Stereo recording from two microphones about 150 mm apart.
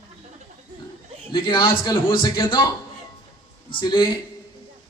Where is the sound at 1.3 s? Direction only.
30° left (ahead or behind).